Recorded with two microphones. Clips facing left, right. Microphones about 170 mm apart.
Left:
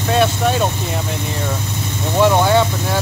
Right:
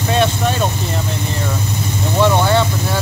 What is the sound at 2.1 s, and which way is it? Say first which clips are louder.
Speech: left 1 dB; 10° left (ahead or behind).